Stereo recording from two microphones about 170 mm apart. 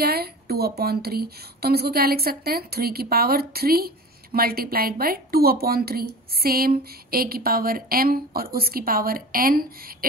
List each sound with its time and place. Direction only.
0.0 s a woman's voice: 65° right (ahead or behind)